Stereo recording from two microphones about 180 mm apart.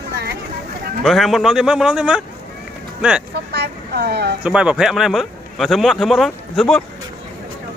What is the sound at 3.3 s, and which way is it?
Speech, 65° right (ahead or behind).